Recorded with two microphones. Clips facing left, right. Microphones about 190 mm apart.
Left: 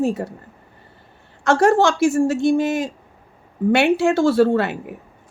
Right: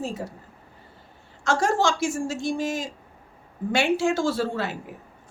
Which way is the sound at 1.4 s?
60° left (ahead or behind).